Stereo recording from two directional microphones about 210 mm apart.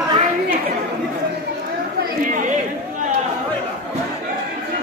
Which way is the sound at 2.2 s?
40° right (ahead or behind).